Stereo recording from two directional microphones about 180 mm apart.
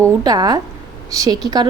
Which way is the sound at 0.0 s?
20° right (ahead or behind).